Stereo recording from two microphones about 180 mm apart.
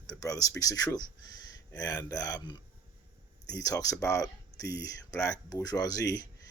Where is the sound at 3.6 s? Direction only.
20° left (ahead or behind).